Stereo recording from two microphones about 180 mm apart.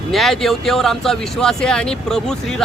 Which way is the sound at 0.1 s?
Centre (ahead or behind).